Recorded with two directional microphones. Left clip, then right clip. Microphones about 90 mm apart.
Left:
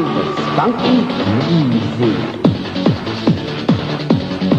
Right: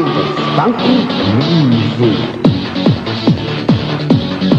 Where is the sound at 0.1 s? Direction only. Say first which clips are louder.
Right 3 dB; 45° left (ahead or behind).